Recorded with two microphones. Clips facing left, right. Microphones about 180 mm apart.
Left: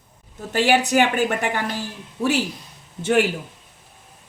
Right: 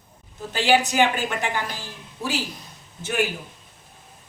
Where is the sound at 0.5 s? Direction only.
60° left (ahead or behind).